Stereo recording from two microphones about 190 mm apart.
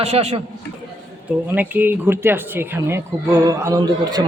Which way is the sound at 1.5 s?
10° right (ahead or behind).